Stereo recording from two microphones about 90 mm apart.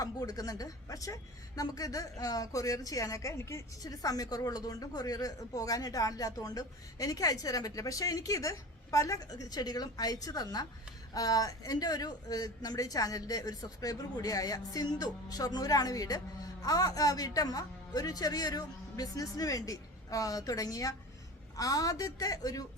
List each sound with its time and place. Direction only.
0.0 s a woman's voice: 45° left (ahead or behind)